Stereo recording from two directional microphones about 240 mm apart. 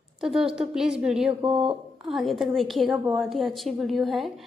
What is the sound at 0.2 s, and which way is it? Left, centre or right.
A woman's voice, centre.